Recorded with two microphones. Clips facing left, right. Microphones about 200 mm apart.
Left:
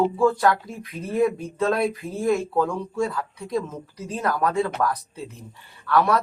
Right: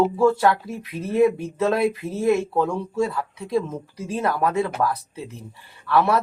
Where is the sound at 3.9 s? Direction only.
10° right (ahead or behind).